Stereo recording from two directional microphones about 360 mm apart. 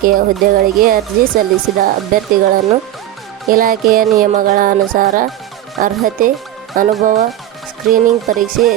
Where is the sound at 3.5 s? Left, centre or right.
Right.